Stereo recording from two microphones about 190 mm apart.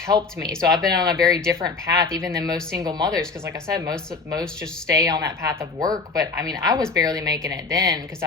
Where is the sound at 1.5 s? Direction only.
20° right (ahead or behind).